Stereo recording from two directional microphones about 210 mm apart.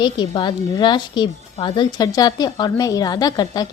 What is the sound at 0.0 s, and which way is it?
A woman's voice, 20° left (ahead or behind).